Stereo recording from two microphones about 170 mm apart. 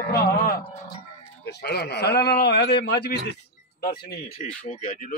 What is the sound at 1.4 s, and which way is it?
A man's voice, 75° left (ahead or behind).